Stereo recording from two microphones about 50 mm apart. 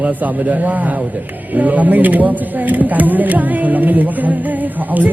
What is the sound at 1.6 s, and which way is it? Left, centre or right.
Speech, right.